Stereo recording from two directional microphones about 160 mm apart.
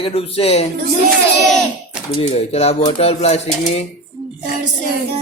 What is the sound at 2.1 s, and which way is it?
A man's voice, 40° left (ahead or behind).